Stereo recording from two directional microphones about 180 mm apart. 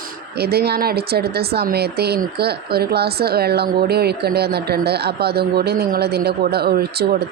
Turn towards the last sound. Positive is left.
turn(degrees=-60)  # may be behind; listen again after turning